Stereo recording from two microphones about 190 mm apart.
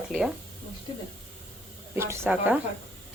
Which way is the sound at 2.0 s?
10° right (ahead or behind).